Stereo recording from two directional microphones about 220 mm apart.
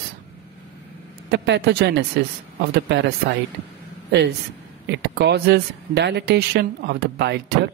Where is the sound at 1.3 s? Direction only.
50° right (ahead or behind).